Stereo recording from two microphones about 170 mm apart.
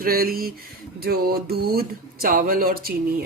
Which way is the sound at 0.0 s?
60° right (ahead or behind).